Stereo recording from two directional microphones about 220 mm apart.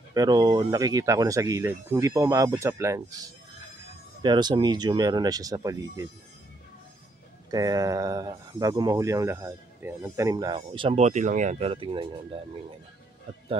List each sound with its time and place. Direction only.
0.1 s speech: 15° right (ahead or behind)
7.5 s speech: 15° right (ahead or behind)